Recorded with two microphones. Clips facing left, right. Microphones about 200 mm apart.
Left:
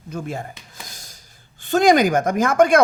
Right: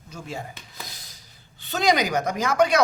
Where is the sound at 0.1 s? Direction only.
55° left (ahead or behind).